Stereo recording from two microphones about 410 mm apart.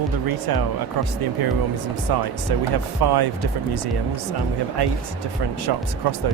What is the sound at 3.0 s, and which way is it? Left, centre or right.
Speech, right.